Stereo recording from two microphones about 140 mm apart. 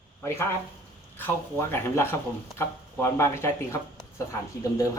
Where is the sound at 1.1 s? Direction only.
15° left (ahead or behind).